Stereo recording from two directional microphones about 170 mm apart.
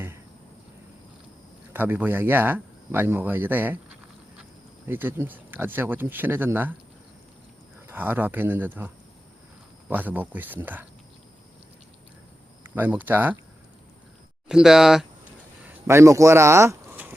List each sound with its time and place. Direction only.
1.7 s speech: 10° right (ahead or behind)
4.9 s speech: 10° right (ahead or behind)
7.9 s speech: 10° right (ahead or behind)
9.9 s speech: 10° right (ahead or behind)
12.6 s speech: 10° right (ahead or behind)
14.4 s speech: 5° right (ahead or behind)
15.9 s speech: 15° right (ahead or behind)